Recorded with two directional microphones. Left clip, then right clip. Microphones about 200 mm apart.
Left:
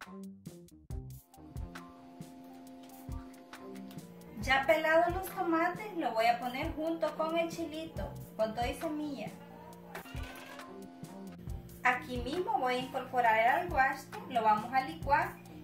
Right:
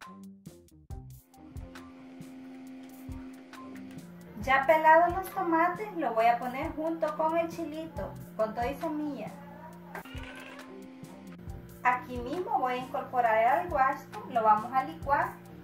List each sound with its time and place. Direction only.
4.4 s a woman's voice: centre (ahead or behind)
11.8 s a woman's voice: centre (ahead or behind)